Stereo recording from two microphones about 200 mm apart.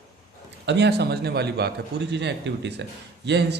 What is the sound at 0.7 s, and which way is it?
A man's voice, 55° right (ahead or behind).